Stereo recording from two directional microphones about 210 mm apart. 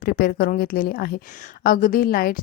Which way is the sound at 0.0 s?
45° left (ahead or behind).